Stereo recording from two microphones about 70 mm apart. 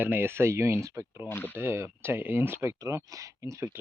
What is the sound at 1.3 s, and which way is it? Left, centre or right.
Speech, left.